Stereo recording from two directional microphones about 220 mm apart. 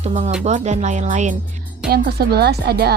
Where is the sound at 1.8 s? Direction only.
45° right (ahead or behind).